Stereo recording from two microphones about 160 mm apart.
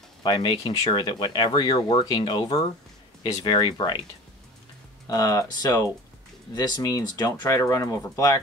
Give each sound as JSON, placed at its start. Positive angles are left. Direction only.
{"t": 0.2, "sound": "speech", "side_deg": 30}
{"t": 5.1, "sound": "speech", "side_deg": 20}